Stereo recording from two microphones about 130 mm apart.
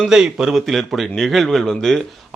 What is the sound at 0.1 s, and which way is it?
A man's voice, 5° right (ahead or behind).